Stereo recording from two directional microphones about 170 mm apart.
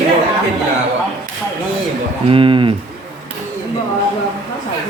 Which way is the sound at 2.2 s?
30° right (ahead or behind).